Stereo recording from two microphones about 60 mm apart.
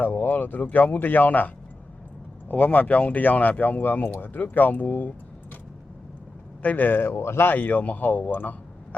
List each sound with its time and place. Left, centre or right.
0.0 s speech: left
6.6 s speech: left
7.5 s speech: left